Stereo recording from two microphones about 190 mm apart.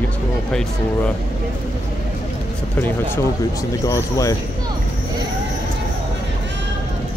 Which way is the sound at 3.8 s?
15° left (ahead or behind).